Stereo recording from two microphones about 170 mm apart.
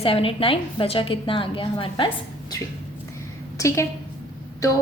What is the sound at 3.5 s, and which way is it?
Speech, 15° left (ahead or behind).